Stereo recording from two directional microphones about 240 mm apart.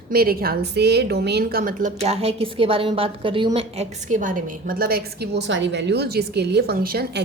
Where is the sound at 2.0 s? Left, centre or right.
Right.